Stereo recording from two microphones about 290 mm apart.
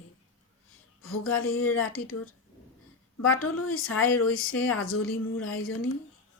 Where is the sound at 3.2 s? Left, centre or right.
Left.